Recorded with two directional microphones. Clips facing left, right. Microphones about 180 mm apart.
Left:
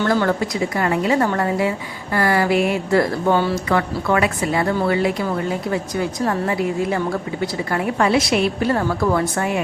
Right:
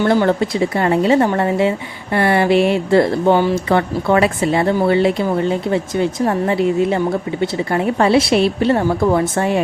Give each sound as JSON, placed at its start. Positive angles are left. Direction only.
{"t": 0.1, "sound": "a woman's voice", "side_deg": -25}